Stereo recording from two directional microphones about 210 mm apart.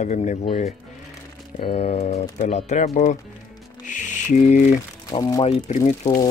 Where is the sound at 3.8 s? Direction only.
35° left (ahead or behind).